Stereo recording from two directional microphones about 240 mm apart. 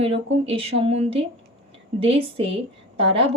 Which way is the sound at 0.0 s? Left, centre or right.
Right.